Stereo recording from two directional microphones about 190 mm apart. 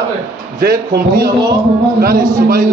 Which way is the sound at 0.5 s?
55° right (ahead or behind).